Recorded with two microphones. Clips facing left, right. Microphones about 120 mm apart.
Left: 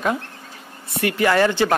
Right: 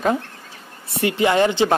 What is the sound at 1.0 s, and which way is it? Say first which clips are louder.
Speech: right 1 dB; 20° right (ahead or behind).